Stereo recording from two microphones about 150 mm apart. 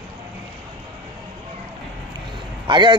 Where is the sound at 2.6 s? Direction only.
30° right (ahead or behind).